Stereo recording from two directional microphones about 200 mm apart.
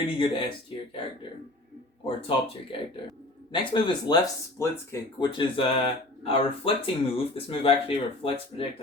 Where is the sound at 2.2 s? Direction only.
25° left (ahead or behind).